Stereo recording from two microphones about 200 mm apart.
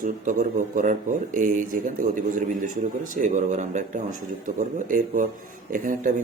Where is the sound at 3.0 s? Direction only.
35° right (ahead or behind).